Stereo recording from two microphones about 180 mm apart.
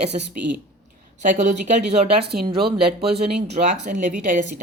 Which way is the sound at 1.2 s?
45° right (ahead or behind).